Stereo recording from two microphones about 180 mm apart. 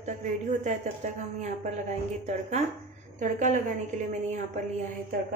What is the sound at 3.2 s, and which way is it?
Speech, 45° right (ahead or behind).